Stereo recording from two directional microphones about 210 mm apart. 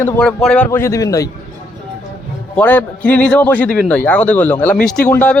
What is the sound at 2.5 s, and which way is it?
Speech, 5° left (ahead or behind).